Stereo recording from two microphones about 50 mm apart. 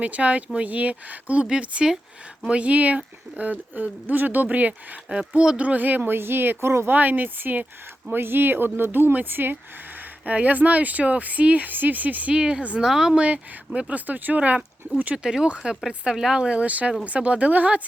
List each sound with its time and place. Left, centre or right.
0.0 s speech: right
5.0 s speech: centre; by 6.7 s right
6.8 s speech: right
10.2 s speech: right
12.3 s speech: centre
13.1 s speech: right
15.2 s speech: centre; by 17.8 s right